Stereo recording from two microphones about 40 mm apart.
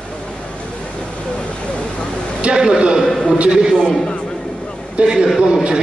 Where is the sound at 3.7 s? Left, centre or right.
Centre.